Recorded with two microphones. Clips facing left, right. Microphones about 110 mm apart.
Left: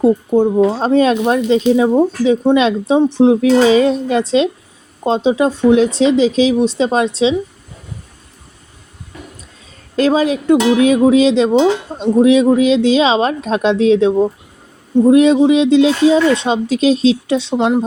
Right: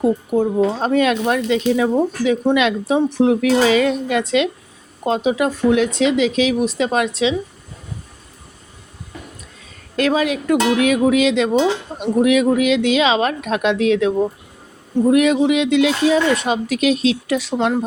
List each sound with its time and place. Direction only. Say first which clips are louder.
0.0 s speech: left 5 dB; 30° left (ahead or behind)
9.9 s speech: left 4 dB; 30° left (ahead or behind)